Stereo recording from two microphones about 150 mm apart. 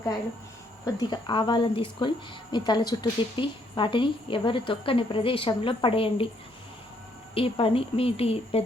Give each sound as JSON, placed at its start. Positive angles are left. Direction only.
{"t": 0.9, "sound": "a woman's voice", "side_deg": 30}
{"t": 7.3, "sound": "a woman's voice", "side_deg": 40}